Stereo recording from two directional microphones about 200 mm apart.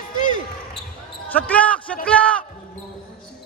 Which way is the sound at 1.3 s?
5° left (ahead or behind).